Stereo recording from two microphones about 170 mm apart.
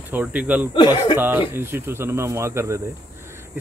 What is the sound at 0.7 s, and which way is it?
Speech, 25° left (ahead or behind).